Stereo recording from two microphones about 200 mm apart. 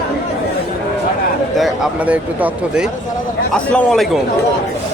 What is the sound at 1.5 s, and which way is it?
Speech, centre (ahead or behind).